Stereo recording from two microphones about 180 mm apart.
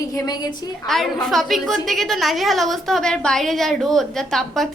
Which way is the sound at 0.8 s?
Centre (ahead or behind).